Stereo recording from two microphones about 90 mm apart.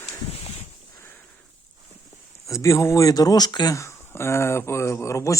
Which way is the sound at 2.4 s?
35° left (ahead or behind).